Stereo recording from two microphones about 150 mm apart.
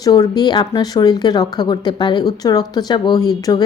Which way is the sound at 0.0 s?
25° left (ahead or behind).